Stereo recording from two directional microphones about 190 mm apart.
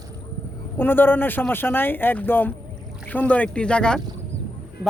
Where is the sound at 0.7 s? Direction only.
10° left (ahead or behind).